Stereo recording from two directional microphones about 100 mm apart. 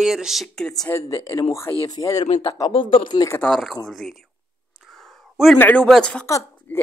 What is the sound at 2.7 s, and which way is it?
Speech, 55° left (ahead or behind).